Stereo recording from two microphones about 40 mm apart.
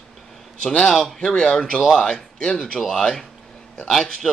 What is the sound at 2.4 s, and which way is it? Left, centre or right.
Speech, left.